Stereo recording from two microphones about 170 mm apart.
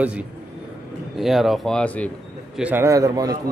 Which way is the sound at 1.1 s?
Centre (ahead or behind).